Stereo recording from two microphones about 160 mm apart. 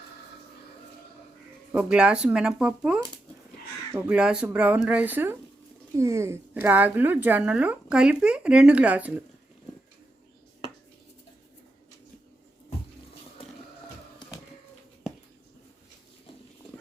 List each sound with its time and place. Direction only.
1.7 s a woman's voice: 5° right (ahead or behind)